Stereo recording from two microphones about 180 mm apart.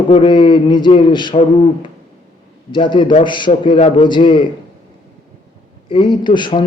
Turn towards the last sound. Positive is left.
turn(degrees=25)  # may be behind; listen again after turning